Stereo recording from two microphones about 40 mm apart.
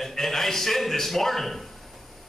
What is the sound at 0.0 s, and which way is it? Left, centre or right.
A man's voice, centre.